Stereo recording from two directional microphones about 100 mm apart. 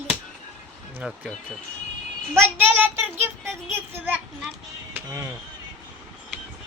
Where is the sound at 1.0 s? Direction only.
10° right (ahead or behind).